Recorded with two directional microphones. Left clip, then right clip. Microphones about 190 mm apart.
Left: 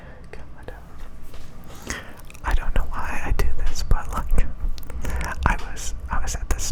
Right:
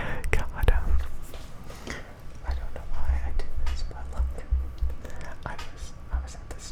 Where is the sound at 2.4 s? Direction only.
30° left (ahead or behind).